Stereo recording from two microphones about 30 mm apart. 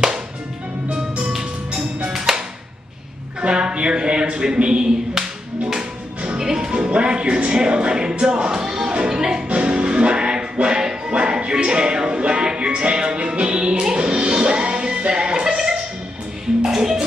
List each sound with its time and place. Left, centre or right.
0.8 s music: right
2.1 s music: centre
3.3 s a man's voice: right
6.3 s music: right
6.8 s music: right
9.5 s music: right
15.2 s music: right